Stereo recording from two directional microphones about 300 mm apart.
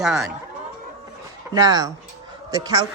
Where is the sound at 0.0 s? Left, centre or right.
Centre.